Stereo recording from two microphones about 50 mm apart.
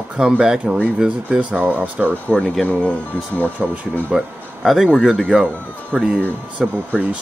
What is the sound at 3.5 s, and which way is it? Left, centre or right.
Speech, right.